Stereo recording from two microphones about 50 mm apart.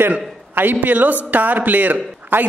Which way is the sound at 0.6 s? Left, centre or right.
Right.